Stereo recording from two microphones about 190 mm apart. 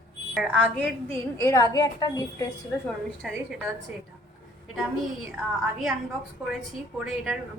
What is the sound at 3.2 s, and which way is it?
Speech, centre (ahead or behind).